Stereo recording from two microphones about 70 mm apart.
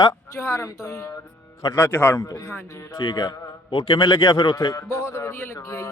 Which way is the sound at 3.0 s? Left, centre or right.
Left.